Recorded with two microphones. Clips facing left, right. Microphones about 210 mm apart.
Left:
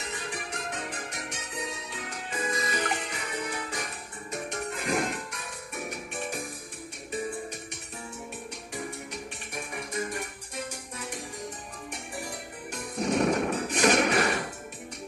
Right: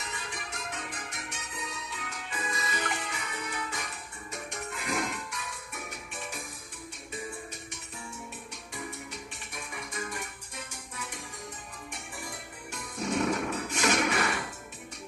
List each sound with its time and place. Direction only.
2.3 s music: 45° left (ahead or behind)
9.9 s music: 40° left (ahead or behind)
13.0 s a sound: 45° left (ahead or behind)